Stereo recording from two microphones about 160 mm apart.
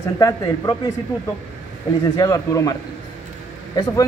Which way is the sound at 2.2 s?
20° left (ahead or behind).